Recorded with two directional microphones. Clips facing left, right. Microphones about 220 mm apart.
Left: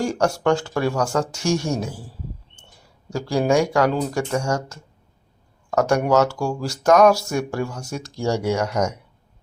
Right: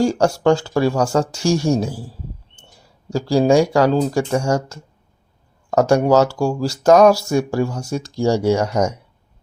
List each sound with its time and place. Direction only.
0.0 s speech: 30° right (ahead or behind)
3.1 s speech: 30° right (ahead or behind)